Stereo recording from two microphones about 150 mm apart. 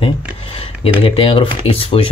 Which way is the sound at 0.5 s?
35° left (ahead or behind).